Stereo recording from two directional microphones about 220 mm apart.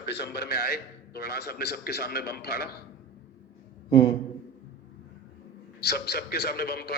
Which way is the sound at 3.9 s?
20° left (ahead or behind).